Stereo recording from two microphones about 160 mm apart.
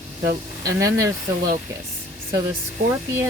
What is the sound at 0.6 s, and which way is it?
Speech, 20° right (ahead or behind).